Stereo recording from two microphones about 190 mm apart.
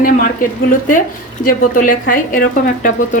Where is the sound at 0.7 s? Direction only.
45° left (ahead or behind).